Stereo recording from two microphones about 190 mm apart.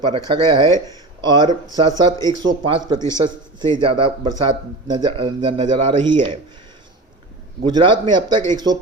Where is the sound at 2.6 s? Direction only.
25° right (ahead or behind).